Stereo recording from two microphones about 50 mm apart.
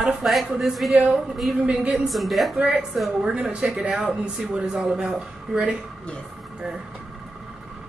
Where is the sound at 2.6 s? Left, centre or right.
Right.